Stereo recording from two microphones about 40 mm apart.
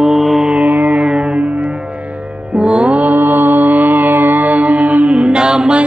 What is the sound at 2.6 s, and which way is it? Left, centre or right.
Music, right.